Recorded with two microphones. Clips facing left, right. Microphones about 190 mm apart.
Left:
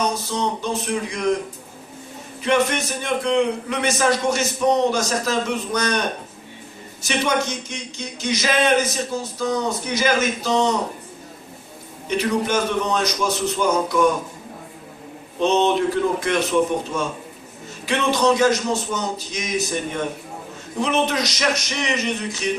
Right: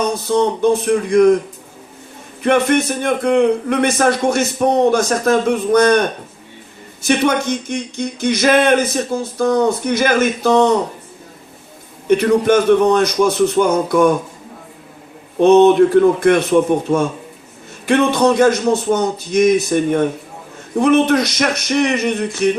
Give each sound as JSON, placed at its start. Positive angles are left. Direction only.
{"t": 0.1, "sound": "speech", "side_deg": -55}
{"t": 2.4, "sound": "speech", "side_deg": -55}
{"t": 12.0, "sound": "speech", "side_deg": -55}
{"t": 15.4, "sound": "speech", "side_deg": -55}